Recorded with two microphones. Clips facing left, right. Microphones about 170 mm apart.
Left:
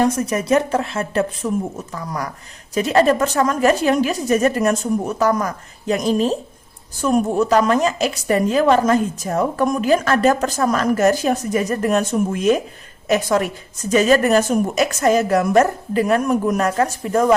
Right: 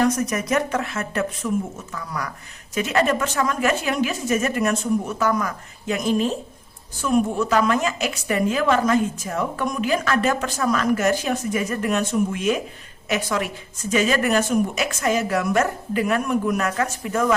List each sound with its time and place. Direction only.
0.0 s a woman's voice: 30° left (ahead or behind)